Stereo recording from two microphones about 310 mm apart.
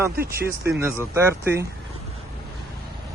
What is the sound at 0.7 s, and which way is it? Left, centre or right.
Speech, centre.